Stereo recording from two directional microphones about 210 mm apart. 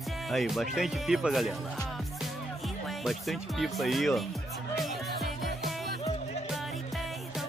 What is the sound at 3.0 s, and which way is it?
Speech, centre (ahead or behind).